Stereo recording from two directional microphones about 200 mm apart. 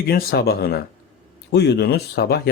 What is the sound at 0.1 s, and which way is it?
Speech, 50° left (ahead or behind).